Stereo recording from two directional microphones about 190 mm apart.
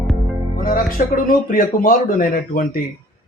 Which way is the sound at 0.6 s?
50° left (ahead or behind).